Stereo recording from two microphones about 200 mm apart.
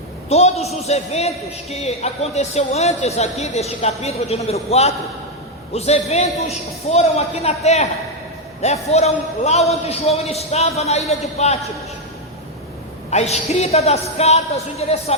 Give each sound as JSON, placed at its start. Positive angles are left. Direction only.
{"t": 0.3, "sound": "speech", "side_deg": 30}
{"t": 13.1, "sound": "speech", "side_deg": 35}